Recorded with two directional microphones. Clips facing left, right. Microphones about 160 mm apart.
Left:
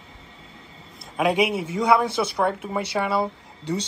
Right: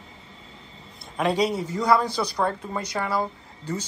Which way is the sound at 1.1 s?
10° left (ahead or behind).